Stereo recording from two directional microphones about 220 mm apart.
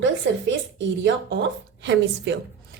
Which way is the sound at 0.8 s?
55° right (ahead or behind).